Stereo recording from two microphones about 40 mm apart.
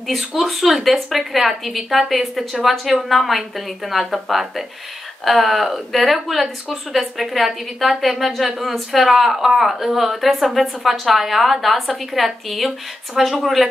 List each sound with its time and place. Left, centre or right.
0.0 s speech: centre